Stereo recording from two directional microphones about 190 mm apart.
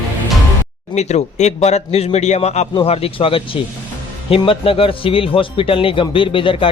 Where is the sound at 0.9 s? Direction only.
35° left (ahead or behind).